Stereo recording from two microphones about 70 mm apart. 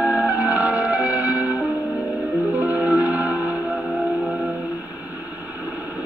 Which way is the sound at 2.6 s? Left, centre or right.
Right.